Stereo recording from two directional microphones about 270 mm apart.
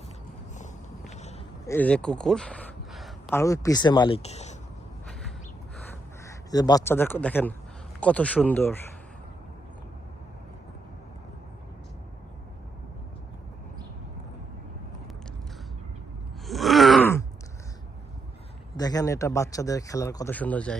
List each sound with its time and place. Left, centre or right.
0.6 s walk: left
1.6 s a man's voice: centre; by 4.5 s left
6.2 s a man's voice: centre
16.5 s groan: centre
18.8 s speech: centre